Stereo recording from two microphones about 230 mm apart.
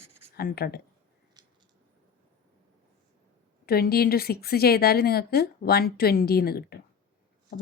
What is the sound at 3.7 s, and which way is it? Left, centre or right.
A woman's voice, left.